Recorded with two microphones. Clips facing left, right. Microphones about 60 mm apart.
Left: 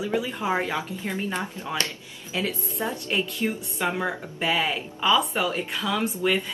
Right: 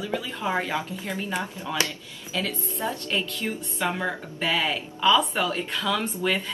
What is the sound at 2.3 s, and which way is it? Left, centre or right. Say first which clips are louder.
Speech: left 1 dB; left.